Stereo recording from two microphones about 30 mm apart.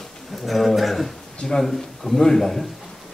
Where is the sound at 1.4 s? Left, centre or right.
Left.